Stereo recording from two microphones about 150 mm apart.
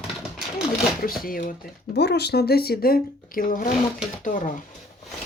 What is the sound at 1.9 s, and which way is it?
Speech, 90° left.